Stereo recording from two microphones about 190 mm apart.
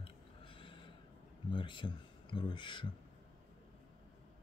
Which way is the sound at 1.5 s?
25° left (ahead or behind).